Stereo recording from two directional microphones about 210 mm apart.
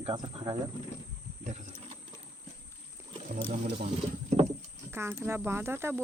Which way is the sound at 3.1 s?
35° right (ahead or behind).